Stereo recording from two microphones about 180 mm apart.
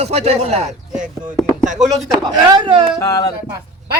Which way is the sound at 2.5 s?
30° right (ahead or behind).